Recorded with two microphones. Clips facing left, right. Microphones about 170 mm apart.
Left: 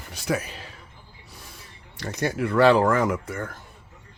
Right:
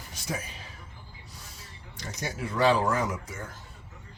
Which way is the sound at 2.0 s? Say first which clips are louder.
Left 9 dB; 60° left (ahead or behind).